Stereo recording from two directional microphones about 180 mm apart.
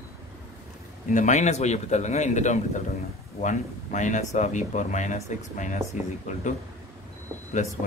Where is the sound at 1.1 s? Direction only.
40° left (ahead or behind).